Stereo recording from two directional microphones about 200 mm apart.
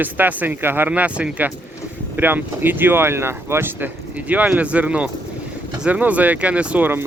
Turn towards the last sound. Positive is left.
turn(degrees=-10)  # may be behind; listen again after turning